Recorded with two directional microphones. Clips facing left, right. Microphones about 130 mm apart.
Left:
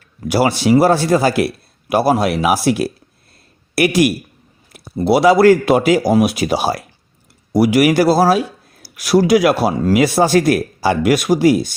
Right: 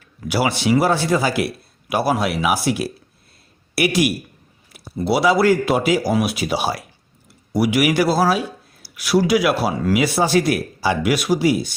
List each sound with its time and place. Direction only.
0.3 s a man's voice: 40° left (ahead or behind)
4.7 s a sound: 45° left (ahead or behind)
5.4 s a man's voice: 55° left (ahead or behind)